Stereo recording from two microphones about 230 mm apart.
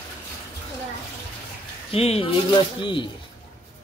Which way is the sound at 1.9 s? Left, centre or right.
Left.